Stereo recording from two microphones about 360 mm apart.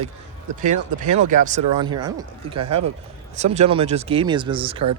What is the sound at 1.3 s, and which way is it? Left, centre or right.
Speech, centre.